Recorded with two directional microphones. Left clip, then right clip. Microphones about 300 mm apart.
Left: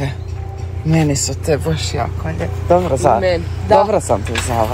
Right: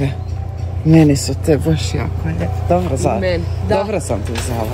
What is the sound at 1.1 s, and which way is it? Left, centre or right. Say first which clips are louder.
Speech: right 2 dB; centre.